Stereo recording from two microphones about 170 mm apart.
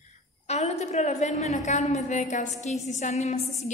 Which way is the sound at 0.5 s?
40° left (ahead or behind).